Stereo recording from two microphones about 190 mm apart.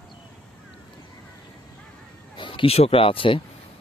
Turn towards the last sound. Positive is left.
turn(degrees=30)  # may be behind; listen again after turning